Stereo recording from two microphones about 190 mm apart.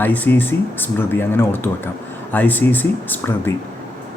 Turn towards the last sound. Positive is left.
turn(degrees=10)  # may be behind; listen again after turning